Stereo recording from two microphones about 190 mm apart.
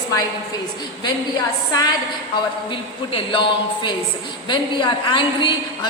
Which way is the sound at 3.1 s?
25° left (ahead or behind).